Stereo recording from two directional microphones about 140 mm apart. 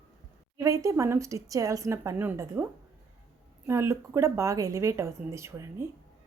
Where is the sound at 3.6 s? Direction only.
20° right (ahead or behind).